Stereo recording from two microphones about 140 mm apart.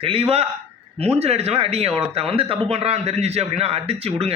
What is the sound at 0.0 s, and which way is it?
A man's voice, 40° right (ahead or behind).